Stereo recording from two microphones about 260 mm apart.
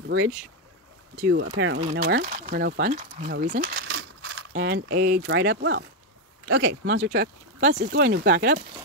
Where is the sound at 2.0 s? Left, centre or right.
Right.